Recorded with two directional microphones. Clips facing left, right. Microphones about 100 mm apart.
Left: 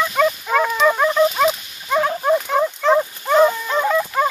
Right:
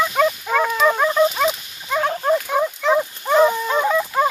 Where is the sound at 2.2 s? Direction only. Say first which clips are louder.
Left 1 dB; 5° left (ahead or behind).